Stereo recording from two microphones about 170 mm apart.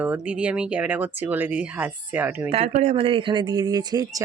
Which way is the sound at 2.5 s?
35° right (ahead or behind).